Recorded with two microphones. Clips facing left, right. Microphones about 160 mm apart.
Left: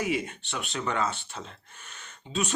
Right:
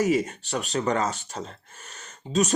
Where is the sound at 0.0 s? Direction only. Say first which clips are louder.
Right 7 dB; 40° right (ahead or behind).